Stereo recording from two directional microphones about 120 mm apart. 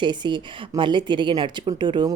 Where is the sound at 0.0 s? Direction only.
40° right (ahead or behind).